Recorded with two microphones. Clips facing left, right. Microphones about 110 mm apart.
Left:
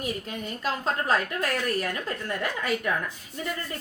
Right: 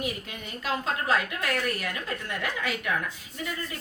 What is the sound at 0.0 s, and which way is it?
A woman's voice, 40° left (ahead or behind).